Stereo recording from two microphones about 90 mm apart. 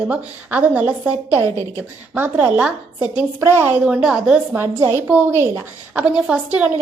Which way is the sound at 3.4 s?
30° right (ahead or behind).